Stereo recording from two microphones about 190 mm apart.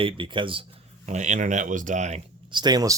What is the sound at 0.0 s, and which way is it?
Speech, 25° right (ahead or behind).